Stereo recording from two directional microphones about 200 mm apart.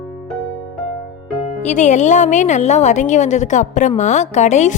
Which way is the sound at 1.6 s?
35° left (ahead or behind).